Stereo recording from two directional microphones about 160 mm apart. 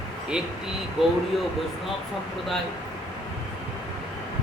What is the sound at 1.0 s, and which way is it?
Speech, centre (ahead or behind).